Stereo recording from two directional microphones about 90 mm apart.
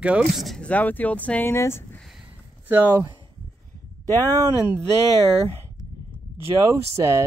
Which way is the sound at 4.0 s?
40° right (ahead or behind).